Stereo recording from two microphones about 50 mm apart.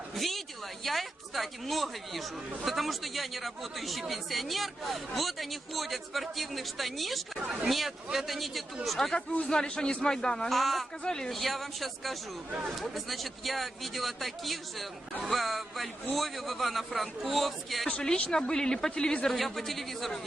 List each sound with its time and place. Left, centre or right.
0.2 s a sound: centre
0.9 s a man's voice: centre
9.1 s speech: left
9.5 s a woman's voice: centre
10.5 s a man's voice: centre
11.0 s a woman's voice: centre
11.3 s a man's voice: centre
17.8 s a woman's voice: centre
19.3 s a man's voice: centre